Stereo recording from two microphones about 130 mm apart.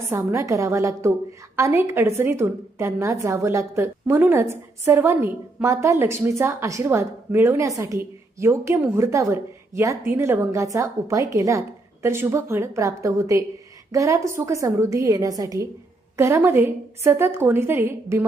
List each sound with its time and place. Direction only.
0.1 s a woman's voice: 20° right (ahead or behind)